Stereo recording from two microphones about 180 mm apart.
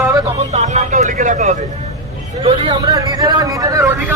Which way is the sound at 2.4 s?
25° right (ahead or behind).